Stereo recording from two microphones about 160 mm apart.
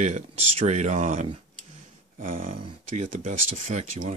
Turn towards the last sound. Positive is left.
turn(degrees=-45)  # may be behind; listen again after turning